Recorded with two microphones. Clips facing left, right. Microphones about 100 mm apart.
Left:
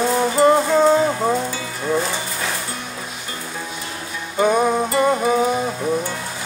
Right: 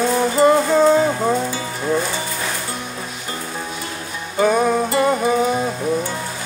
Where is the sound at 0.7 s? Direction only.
5° left (ahead or behind).